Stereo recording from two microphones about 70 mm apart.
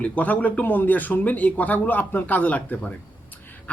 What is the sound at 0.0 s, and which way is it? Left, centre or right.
A man's voice, left.